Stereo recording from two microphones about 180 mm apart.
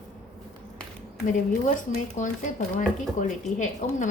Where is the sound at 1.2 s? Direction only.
45° left (ahead or behind).